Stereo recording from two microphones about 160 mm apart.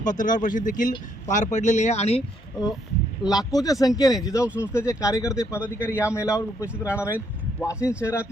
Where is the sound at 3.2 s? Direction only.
25° left (ahead or behind).